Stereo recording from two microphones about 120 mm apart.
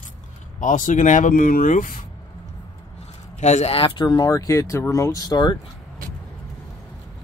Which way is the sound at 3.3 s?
70° left (ahead or behind).